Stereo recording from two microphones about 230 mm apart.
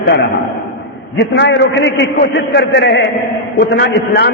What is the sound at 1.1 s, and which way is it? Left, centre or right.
A man's voice, left.